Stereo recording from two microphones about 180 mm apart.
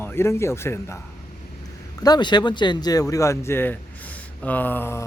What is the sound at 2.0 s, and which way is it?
Speech, 25° left (ahead or behind).